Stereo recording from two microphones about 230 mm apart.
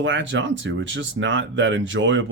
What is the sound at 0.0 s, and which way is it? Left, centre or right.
Speech, right.